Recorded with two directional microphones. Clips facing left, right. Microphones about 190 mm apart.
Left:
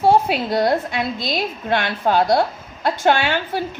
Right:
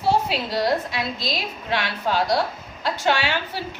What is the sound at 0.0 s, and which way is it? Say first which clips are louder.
A woman's voice: left 6 dB; 55° left (ahead or behind).